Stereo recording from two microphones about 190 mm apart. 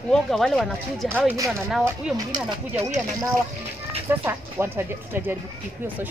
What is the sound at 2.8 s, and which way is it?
Speech, 40° right (ahead or behind).